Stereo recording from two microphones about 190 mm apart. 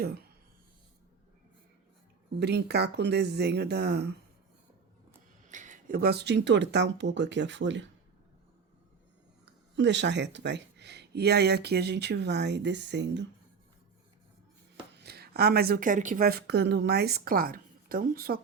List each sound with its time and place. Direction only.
0.0 s speech: 55° right (ahead or behind)
2.4 s speech: 60° right (ahead or behind)
5.5 s speech: 40° right (ahead or behind); by 7.9 s 70° right (ahead or behind)
9.7 s speech: 70° right (ahead or behind)
14.9 s speech: 60° right (ahead or behind)